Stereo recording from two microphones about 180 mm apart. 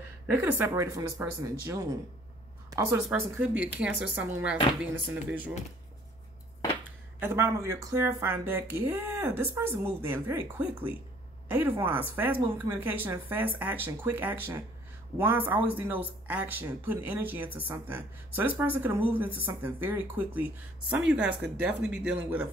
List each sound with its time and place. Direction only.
0.4 s speech: 10° right (ahead or behind)
7.2 s speech: 15° right (ahead or behind)